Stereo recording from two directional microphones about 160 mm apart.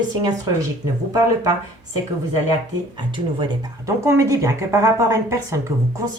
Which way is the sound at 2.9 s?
30° right (ahead or behind).